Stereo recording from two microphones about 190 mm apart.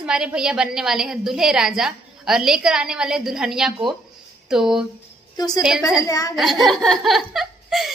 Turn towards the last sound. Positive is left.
turn(degrees=0)  # may be behind; listen again after turning